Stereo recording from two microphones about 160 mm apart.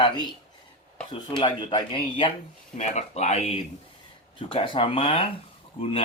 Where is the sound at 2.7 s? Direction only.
45° left (ahead or behind).